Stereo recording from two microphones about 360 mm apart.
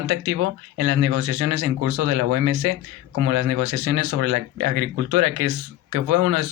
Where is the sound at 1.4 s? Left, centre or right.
Right.